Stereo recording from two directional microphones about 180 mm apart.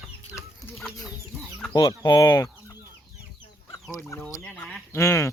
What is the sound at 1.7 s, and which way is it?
Speech, 25° left (ahead or behind).